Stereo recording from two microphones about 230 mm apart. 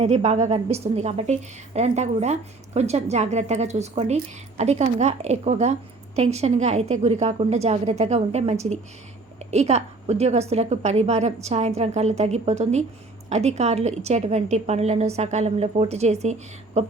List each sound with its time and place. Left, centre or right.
0.0 s a woman's voice: right